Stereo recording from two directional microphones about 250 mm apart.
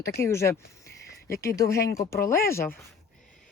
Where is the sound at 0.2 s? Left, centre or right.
Centre.